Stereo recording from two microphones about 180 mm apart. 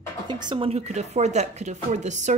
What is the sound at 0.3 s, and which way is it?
Speech, 25° right (ahead or behind).